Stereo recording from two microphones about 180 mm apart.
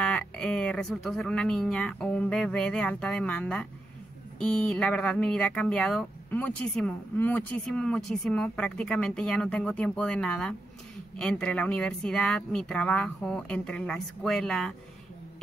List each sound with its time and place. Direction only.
0.0 s speech: 5° left (ahead or behind)